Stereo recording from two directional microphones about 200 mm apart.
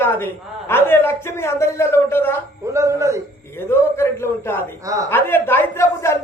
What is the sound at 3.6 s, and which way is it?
Speech, 10° left (ahead or behind).